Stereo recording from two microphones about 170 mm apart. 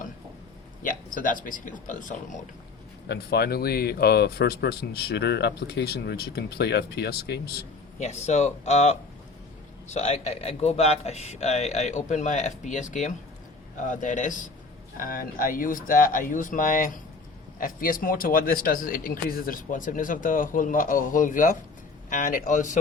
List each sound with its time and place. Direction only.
0.8 s speech: 50° left (ahead or behind)
3.1 s speech: 70° left (ahead or behind)
7.9 s a man's voice: 40° left (ahead or behind)